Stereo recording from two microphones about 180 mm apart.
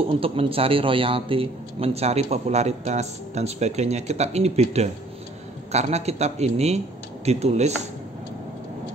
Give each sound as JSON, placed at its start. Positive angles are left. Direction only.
{"t": 0.2, "sound": "a man's voice", "side_deg": -30}